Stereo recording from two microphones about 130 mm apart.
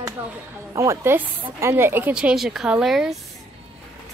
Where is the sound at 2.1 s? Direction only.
5° right (ahead or behind).